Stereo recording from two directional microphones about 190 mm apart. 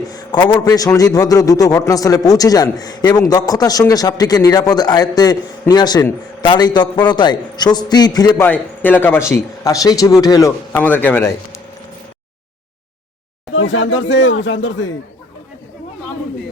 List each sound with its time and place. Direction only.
0.1 s a man's voice: 20° left (ahead or behind)
8.4 s a man's voice: 10° left (ahead or behind)
13.5 s speech: 90° left